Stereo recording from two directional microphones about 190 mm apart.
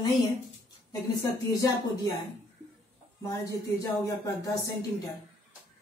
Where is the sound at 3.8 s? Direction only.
15° left (ahead or behind).